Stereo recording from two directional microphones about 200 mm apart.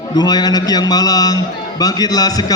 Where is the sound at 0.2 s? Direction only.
20° left (ahead or behind).